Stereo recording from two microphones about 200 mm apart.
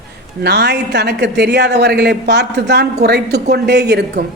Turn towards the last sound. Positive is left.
turn(degrees=-55)  # may be behind; listen again after turning